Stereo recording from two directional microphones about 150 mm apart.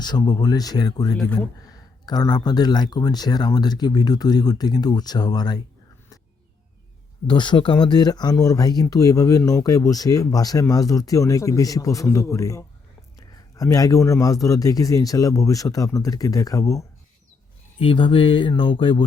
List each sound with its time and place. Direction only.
0.0 s speech: 30° left (ahead or behind)
1.1 s speech: 5° left (ahead or behind)
1.6 s speech: 25° left (ahead or behind)
7.3 s speech: 30° left (ahead or behind)
17.7 s speech: 35° left (ahead or behind)